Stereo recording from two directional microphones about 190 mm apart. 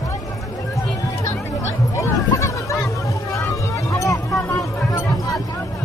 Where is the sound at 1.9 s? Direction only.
15° left (ahead or behind).